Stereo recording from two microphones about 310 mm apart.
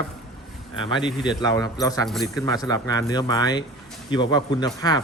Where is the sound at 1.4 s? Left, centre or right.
Centre.